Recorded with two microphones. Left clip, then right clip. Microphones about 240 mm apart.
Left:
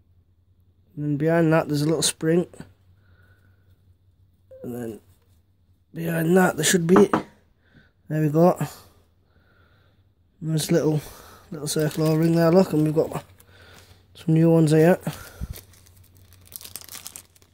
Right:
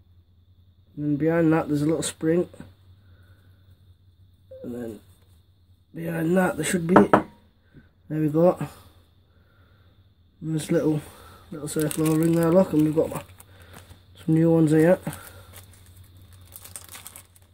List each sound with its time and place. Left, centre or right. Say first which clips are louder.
0.9 s speech: left 1 dB; left
4.6 s a sound: left 1 dB; left
5.9 s speech: left 3 dB; left
8.1 s speech: left 1 dB; left
10.4 s speech: left 2 dB; left
16.7 s crumpling: left 2 dB; centre